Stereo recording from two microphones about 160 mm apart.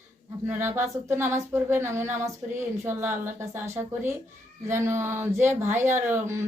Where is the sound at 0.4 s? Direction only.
15° right (ahead or behind).